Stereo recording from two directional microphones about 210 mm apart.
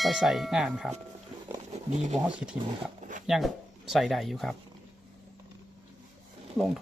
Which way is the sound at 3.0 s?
35° right (ahead or behind).